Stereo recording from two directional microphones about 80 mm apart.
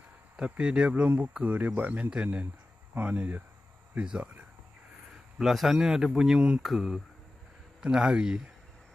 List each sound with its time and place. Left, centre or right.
0.4 s speech: centre
0.9 s speech: right
5.1 s speech: centre